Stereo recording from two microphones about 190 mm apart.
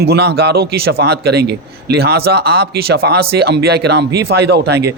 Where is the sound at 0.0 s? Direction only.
60° right (ahead or behind).